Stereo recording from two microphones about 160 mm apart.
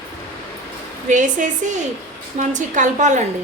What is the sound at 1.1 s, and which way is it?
A woman's voice, 50° right (ahead or behind).